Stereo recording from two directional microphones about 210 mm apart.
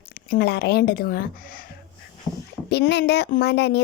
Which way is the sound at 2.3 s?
20° left (ahead or behind).